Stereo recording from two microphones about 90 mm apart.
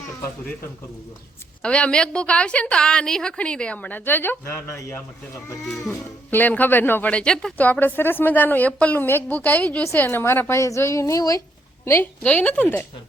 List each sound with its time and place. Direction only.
1.6 s a woman's voice: 10° left (ahead or behind); by 5.0 s 30° left (ahead or behind)
6.3 s a woman's voice: 20° left (ahead or behind)
7.1 s a woman's voice: 10° left (ahead or behind)
10.6 s a sound: 35° left (ahead or behind)
12.2 s a woman's voice: 15° left (ahead or behind)